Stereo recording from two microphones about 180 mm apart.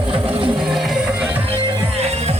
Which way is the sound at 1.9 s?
35° right (ahead or behind).